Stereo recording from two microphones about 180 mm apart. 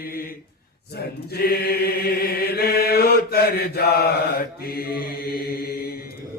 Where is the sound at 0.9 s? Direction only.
60° left (ahead or behind).